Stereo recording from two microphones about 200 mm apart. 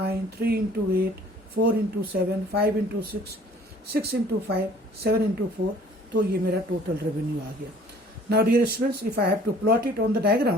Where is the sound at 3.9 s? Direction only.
50° right (ahead or behind).